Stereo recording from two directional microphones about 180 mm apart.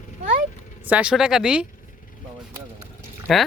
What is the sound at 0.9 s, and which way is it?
Speech, 5° right (ahead or behind).